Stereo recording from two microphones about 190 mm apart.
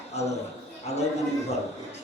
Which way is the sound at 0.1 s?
35° left (ahead or behind).